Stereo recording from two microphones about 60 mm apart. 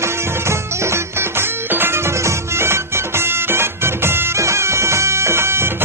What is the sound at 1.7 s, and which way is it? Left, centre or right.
Music, right.